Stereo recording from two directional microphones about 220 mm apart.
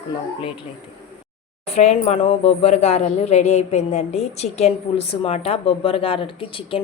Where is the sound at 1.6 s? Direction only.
30° left (ahead or behind).